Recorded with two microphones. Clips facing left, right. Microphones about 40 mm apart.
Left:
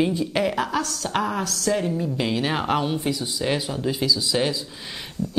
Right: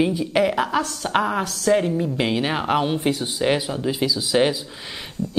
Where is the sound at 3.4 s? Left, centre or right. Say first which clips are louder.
Right 4 dB; centre.